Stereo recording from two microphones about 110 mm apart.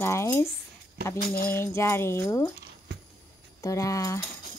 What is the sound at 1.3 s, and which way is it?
A woman's voice, 20° left (ahead or behind).